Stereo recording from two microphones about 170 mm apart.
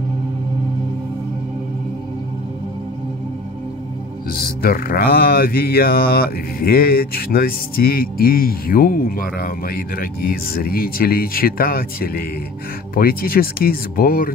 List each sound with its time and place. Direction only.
4.3 s mantra: 60° left (ahead or behind)